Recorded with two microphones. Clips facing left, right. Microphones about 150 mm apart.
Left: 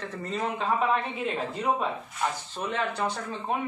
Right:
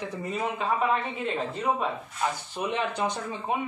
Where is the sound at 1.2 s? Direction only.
Centre (ahead or behind).